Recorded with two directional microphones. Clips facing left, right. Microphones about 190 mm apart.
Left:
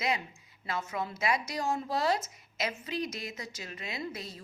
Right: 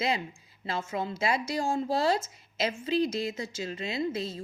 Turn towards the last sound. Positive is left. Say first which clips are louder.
# right 8 dB
turn(degrees=-25)  # may be behind; listen again after turning